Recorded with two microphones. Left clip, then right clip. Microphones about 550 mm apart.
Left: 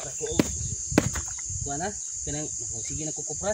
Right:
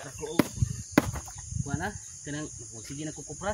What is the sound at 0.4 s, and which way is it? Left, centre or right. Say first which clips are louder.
Basketball bounce: even; right.